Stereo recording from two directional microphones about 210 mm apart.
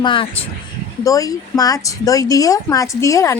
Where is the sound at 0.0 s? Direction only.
25° left (ahead or behind).